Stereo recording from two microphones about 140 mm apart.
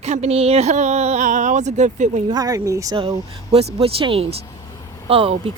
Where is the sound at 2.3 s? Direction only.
25° right (ahead or behind).